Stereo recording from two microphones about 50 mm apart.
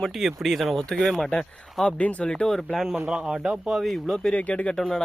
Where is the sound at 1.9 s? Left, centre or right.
Left.